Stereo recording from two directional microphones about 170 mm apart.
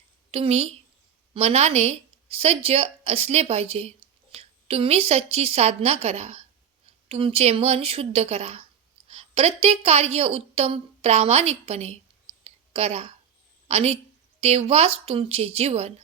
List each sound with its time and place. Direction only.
0.3 s a woman's voice: 35° right (ahead or behind)
12.5 s a sound: 35° right (ahead or behind)
13.7 s a woman's voice: 40° right (ahead or behind)